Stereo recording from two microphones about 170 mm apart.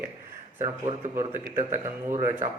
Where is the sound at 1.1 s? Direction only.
15° right (ahead or behind).